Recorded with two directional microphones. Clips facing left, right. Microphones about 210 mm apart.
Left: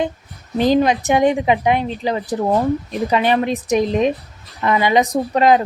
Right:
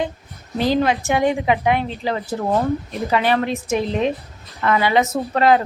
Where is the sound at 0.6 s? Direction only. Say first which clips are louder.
Left 3 dB; 15° left (ahead or behind).